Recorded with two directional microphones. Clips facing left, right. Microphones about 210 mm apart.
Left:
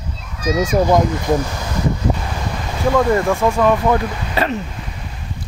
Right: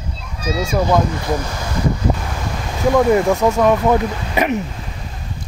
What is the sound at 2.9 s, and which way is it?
Speech, 15° right (ahead or behind).